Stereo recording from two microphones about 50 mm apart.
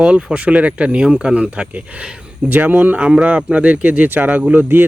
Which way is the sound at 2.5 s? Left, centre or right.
Right.